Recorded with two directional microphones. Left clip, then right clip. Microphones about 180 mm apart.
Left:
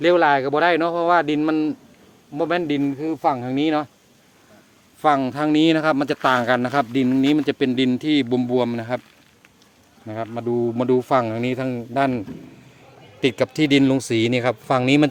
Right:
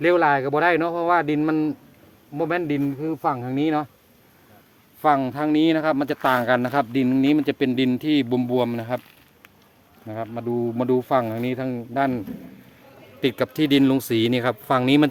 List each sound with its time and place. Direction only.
0.0 s speech: 10° left (ahead or behind)
5.0 s speech: 15° left (ahead or behind)
10.1 s speech: 15° left (ahead or behind)
13.2 s speech: 10° left (ahead or behind)